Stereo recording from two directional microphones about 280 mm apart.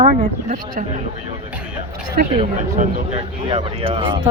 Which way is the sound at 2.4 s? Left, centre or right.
Right.